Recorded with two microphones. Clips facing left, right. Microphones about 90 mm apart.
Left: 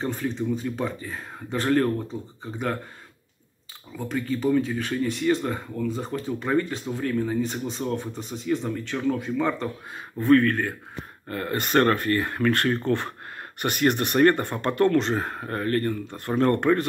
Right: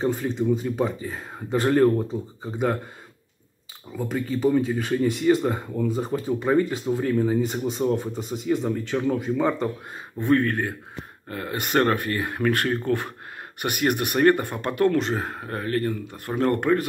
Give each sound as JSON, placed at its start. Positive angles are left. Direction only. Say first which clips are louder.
{"t": 0.0, "sound": "speech", "louder": "right 4 dB", "side_deg": -5}
{"t": 3.9, "sound": "speech", "louder": "right 1 dB", "side_deg": -5}
{"t": 10.1, "sound": "speech", "louder": "left 2 dB", "side_deg": -20}